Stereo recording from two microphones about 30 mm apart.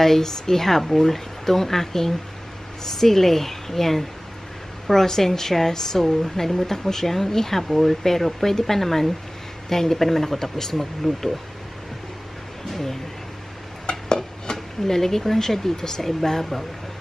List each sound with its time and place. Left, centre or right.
0.0 s a woman's voice: centre
13.8 s stir: left
14.9 s a woman's voice: centre